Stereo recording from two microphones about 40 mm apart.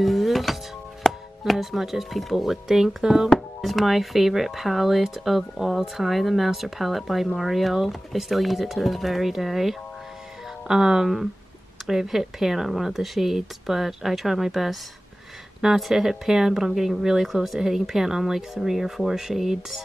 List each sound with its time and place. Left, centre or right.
0.0 s music: centre
1.0 s tabla: centre
1.4 s speech: centre
3.3 s speech: centre